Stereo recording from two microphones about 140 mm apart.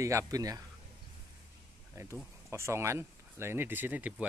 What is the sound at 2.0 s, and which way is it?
Speech, 20° right (ahead or behind).